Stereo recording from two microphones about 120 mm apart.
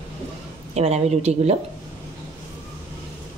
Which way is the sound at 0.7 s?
65° right (ahead or behind).